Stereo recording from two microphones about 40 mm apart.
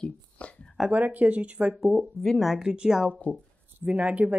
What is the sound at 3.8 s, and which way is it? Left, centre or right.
Speech, right.